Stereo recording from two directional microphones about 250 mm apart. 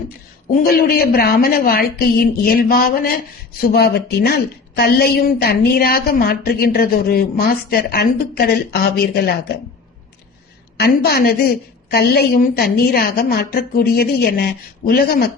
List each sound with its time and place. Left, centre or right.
0.5 s a woman's voice: left
10.8 s a woman's voice: left